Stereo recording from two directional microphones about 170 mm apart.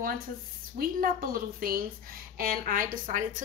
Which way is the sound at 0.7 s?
60° right (ahead or behind).